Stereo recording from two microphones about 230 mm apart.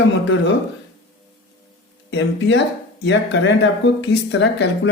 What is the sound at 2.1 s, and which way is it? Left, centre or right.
Speech, left.